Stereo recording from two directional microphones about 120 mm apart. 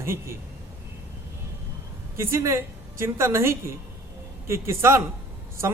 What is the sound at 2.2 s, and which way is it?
Speech, 20° right (ahead or behind).